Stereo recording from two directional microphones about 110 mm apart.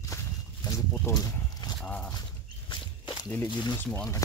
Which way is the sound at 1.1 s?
35° left (ahead or behind).